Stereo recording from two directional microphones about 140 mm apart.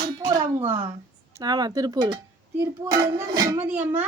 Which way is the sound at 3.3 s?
25° right (ahead or behind).